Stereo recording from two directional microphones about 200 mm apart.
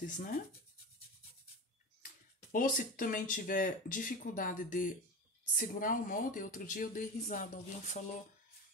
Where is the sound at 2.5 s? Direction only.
45° left (ahead or behind).